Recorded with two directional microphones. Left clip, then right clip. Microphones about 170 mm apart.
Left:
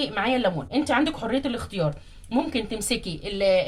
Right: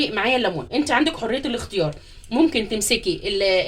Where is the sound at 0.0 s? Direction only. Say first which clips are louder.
Right 3 dB; 45° right (ahead or behind).